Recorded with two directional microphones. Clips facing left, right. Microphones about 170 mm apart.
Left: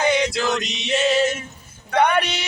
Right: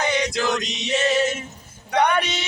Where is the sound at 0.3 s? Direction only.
15° right (ahead or behind).